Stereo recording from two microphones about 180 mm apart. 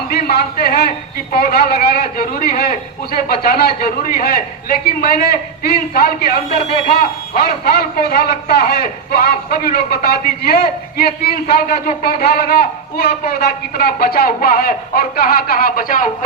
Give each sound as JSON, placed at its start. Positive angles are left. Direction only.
{"t": 0.1, "sound": "speech", "side_deg": 60}